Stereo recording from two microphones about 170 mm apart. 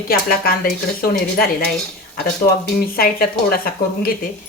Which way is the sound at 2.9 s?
60° left (ahead or behind).